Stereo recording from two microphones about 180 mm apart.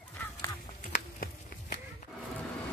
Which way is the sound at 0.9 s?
50° left (ahead or behind).